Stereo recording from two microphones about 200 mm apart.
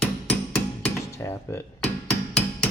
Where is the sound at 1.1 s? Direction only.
15° left (ahead or behind).